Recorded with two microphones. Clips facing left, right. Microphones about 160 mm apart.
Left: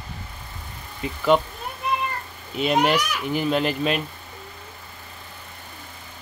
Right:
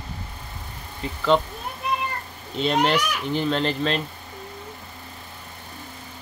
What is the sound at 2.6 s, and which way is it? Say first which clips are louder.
Speech: left 1 dB; 10° left (ahead or behind).